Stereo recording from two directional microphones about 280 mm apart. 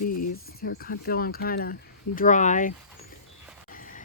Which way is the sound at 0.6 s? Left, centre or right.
Left.